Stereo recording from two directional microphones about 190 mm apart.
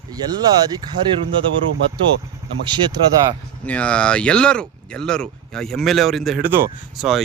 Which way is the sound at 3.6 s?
5° left (ahead or behind).